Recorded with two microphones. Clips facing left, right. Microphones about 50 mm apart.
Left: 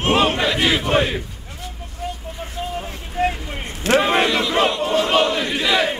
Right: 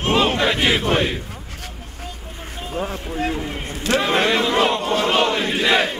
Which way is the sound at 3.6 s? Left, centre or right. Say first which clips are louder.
Left 4 dB; left.